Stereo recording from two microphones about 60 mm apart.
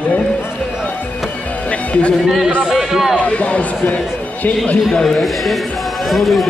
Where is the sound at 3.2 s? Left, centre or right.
Left.